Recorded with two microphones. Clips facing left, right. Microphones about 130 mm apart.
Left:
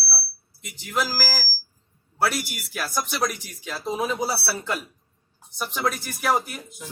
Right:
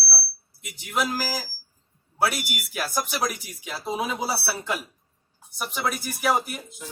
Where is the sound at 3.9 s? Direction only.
15° right (ahead or behind).